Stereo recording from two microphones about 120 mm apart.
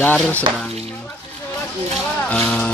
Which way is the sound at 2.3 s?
10° left (ahead or behind).